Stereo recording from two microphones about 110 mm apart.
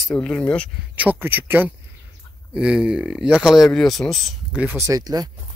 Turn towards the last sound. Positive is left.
turn(degrees=-35)  # may be behind; listen again after turning